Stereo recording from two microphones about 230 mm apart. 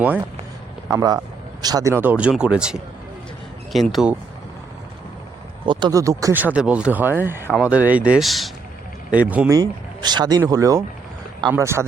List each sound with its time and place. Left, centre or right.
0.0 s speech: centre
5.6 s speech: centre